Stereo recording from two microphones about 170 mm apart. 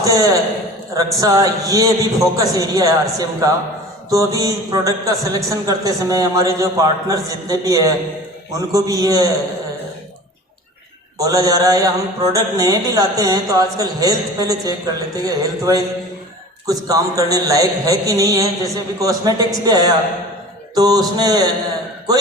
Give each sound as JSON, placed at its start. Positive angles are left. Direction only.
{"t": 0.0, "sound": "a man's voice", "side_deg": -20}
{"t": 11.2, "sound": "a man's voice", "side_deg": -20}